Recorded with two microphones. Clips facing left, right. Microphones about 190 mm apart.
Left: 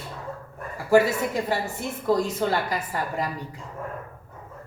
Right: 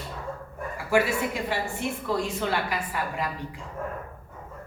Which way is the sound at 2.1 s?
40° left (ahead or behind).